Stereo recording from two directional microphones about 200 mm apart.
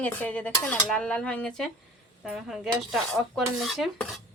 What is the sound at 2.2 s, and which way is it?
Cutlery, 5° right (ahead or behind).